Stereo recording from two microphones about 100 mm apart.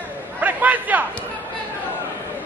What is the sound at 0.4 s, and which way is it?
Chatter, 15° right (ahead or behind).